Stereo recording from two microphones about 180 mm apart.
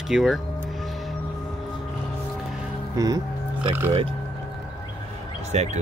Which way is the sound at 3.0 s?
20° right (ahead or behind).